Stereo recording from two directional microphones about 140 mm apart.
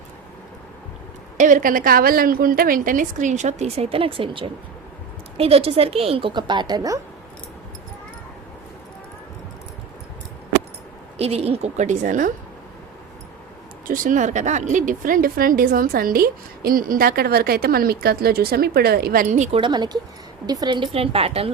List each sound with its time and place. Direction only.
1.4 s a woman's voice: 70° right (ahead or behind); by 7.0 s 25° right (ahead or behind)
11.2 s a woman's voice: 45° right (ahead or behind); by 12.3 s 65° right (ahead or behind)
13.8 s speech: 75° right (ahead or behind); by 19.5 s 60° right (ahead or behind)
19.5 s a woman's voice: 35° right (ahead or behind)